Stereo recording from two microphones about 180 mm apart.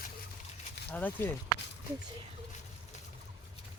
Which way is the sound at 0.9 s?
10° left (ahead or behind).